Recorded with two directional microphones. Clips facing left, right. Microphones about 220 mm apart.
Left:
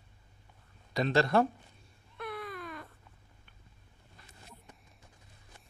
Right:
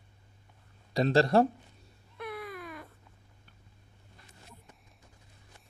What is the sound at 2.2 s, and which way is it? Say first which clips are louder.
Baby cry: right 1 dB; 10° right (ahead or behind).